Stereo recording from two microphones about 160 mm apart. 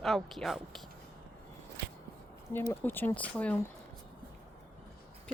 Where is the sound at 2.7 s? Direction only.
15° left (ahead or behind).